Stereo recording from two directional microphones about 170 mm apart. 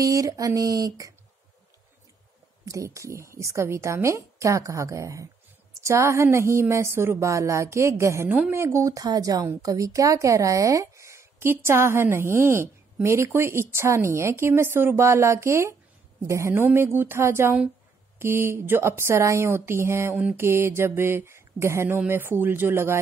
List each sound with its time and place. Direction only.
0.0 s speech: 20° right (ahead or behind)
2.6 s a woman's voice: 20° right (ahead or behind)